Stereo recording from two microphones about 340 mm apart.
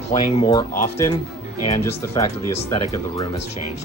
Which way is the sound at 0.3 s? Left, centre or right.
Centre.